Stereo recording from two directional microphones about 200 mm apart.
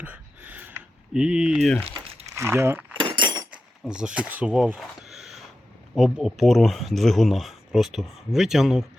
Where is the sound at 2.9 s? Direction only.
25° right (ahead or behind).